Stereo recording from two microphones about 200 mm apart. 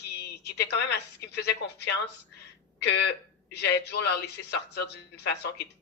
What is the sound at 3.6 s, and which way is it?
Speech, 60° left (ahead or behind).